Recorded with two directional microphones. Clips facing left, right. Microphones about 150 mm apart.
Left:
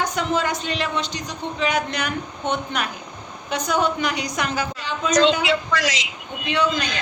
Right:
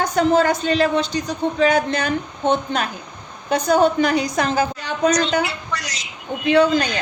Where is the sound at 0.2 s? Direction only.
40° right (ahead or behind).